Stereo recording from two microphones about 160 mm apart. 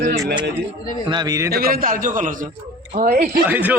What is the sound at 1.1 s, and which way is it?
Speech, 25° right (ahead or behind).